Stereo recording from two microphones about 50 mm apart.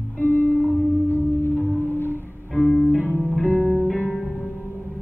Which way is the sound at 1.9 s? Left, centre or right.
Left.